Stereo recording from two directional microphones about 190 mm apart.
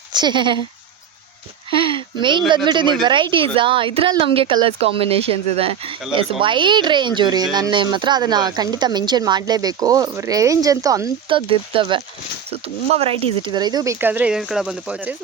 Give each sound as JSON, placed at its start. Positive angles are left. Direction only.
{"t": 0.1, "sound": "speech", "side_deg": -25}
{"t": 1.7, "sound": "speech", "side_deg": -25}